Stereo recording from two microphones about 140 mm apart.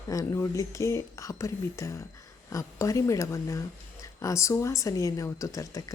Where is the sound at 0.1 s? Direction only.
25° left (ahead or behind).